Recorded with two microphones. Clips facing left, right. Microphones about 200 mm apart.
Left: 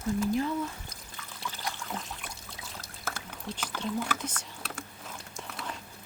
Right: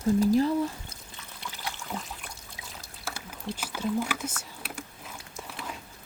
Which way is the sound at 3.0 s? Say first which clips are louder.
Right 1 dB; 10° right (ahead or behind).